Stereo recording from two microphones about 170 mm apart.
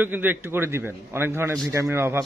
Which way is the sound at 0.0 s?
10° right (ahead or behind).